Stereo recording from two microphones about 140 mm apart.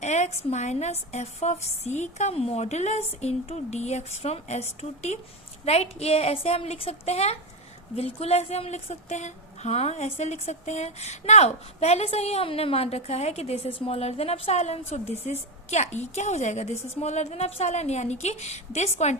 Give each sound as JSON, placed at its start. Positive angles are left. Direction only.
{"t": 0.0, "sound": "a woman's voice", "side_deg": 55}